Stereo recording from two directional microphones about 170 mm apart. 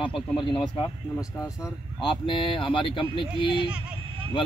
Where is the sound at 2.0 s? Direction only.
30° left (ahead or behind).